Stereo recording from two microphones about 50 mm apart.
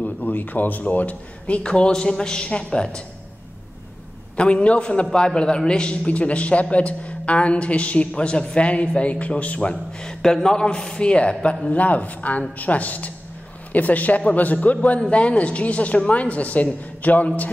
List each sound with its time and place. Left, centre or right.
0.0 s a man's voice: left
1.6 s a woman's voice: centre
4.4 s a man's voice: left